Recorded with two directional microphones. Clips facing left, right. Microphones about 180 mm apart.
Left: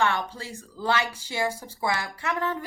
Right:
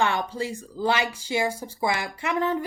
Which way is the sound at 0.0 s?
15° right (ahead or behind).